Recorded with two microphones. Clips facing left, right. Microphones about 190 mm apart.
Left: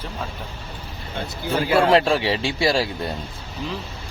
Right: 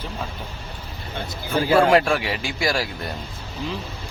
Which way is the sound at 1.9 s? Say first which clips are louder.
Left 1 dB; 25° left (ahead or behind).